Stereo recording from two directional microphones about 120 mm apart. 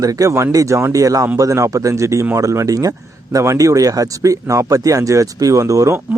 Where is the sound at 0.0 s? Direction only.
30° right (ahead or behind).